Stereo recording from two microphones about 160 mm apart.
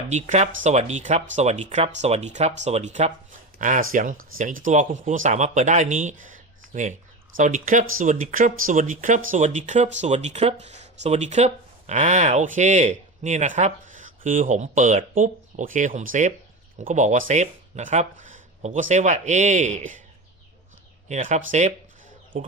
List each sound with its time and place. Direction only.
0.1 s speech: 45° right (ahead or behind)
21.1 s speech: 50° right (ahead or behind)